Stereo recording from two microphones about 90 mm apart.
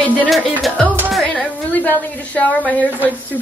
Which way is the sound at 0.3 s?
5° left (ahead or behind).